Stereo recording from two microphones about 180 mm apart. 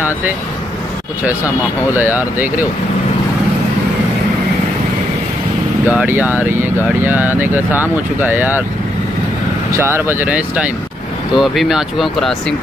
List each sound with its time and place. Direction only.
2.0 s speech: 10° right (ahead or behind)
5.9 s speech: 10° right (ahead or behind)
9.8 s speech: 15° right (ahead or behind); by 12.5 s centre (ahead or behind)